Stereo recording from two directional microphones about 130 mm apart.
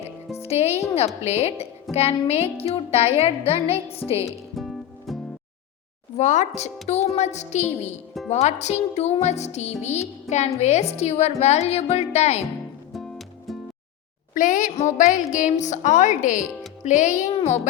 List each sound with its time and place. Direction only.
0.4 s speech: 55° left (ahead or behind)
4.3 s music: centre (ahead or behind)
6.1 s a woman's voice: 65° left (ahead or behind)
12.9 s music: centre (ahead or behind)
14.3 s a woman's voice: 80° left
14.8 s a woman's voice: 65° left (ahead or behind)
17.3 s a child's voice: 55° left (ahead or behind)